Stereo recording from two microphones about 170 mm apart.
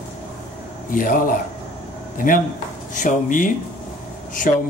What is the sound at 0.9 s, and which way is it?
Speech, 50° left (ahead or behind).